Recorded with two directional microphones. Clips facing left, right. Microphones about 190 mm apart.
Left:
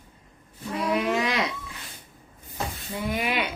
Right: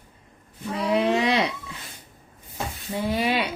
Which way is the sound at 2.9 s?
30° right (ahead or behind).